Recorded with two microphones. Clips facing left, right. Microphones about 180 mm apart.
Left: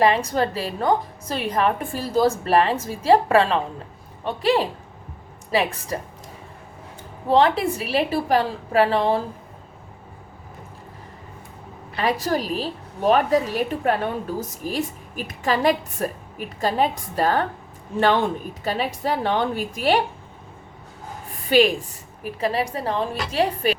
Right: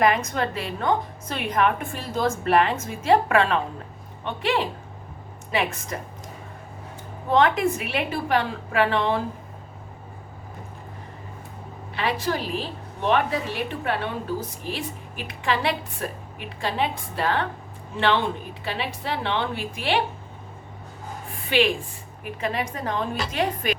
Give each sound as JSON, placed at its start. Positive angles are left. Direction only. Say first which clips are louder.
{"t": 0.0, "sound": "a woman's voice", "louder": "left 3 dB", "side_deg": 30}
{"t": 7.3, "sound": "a woman's voice", "louder": "left 2 dB", "side_deg": 30}
{"t": 11.9, "sound": "a woman's voice", "louder": "left 3 dB", "side_deg": 40}
{"t": 21.5, "sound": "a woman's voice", "louder": "left 5 dB", "side_deg": 40}